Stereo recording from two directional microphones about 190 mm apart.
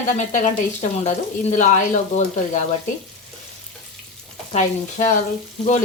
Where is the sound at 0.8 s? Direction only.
40° left (ahead or behind).